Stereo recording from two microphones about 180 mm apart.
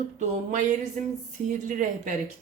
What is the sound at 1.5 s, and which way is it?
Speech, 45° right (ahead or behind).